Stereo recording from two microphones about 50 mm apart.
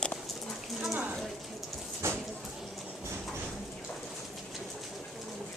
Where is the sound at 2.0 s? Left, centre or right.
Right.